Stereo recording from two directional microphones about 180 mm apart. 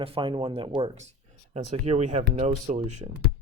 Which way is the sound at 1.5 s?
35° right (ahead or behind).